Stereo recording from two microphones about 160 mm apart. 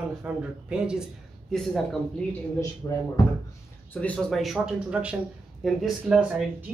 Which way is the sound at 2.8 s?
20° left (ahead or behind).